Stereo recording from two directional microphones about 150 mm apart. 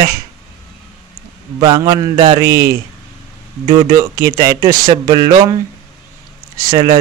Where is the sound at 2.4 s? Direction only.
90° right.